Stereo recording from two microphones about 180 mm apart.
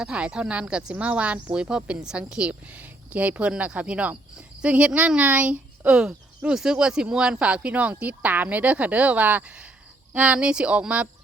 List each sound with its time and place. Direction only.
0.0 s speech: 5° right (ahead or behind)